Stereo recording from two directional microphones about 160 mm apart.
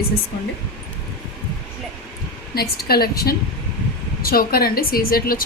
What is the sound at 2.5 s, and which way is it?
A woman's voice, 75° left (ahead or behind).